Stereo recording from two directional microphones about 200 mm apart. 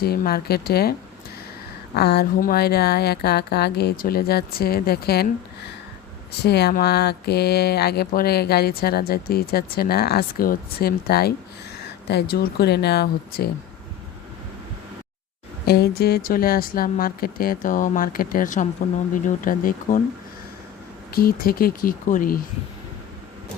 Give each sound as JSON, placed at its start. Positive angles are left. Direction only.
{"t": 0.0, "sound": "speech", "side_deg": 50}
{"t": 2.0, "sound": "speech", "side_deg": 55}
{"t": 6.4, "sound": "speech", "side_deg": 55}
{"t": 15.6, "sound": "speech", "side_deg": 50}
{"t": 21.1, "sound": "speech", "side_deg": 50}